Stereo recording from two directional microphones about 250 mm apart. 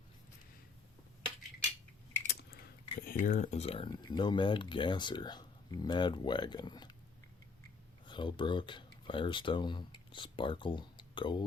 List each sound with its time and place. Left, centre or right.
3.1 s speech: left
8.0 s speech: centre